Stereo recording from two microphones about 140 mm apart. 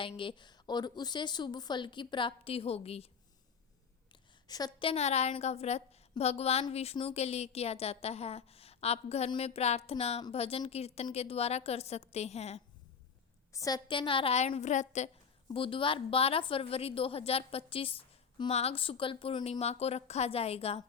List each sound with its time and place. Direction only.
0.0 s a woman's voice: 35° left (ahead or behind)
4.1 s a sound: 30° left (ahead or behind)
4.9 s a woman's voice: 50° left (ahead or behind)
13.5 s a woman's voice: 25° left (ahead or behind); by 15.1 s 55° left (ahead or behind)
15.4 s a woman's voice: 40° left (ahead or behind)
19.5 s a woman's voice: 50° left (ahead or behind)